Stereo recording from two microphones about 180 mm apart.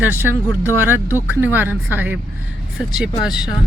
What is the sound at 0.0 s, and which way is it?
Speech, 10° right (ahead or behind).